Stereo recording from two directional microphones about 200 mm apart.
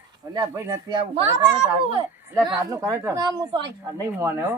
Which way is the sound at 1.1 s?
30° right (ahead or behind).